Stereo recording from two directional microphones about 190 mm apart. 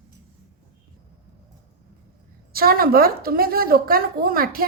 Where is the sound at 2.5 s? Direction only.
50° right (ahead or behind).